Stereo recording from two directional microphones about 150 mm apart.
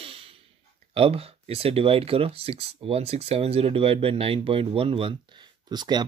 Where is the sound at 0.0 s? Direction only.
40° right (ahead or behind).